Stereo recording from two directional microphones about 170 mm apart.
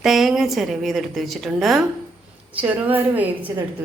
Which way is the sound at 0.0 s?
Centre (ahead or behind).